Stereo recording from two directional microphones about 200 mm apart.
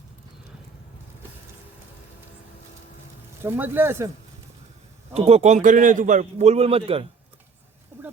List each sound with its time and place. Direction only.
3.4 s speech: 10° right (ahead or behind)
5.1 s a man's voice: 30° right (ahead or behind)